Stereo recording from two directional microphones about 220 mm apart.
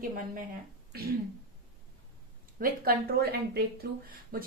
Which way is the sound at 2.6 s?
40° right (ahead or behind).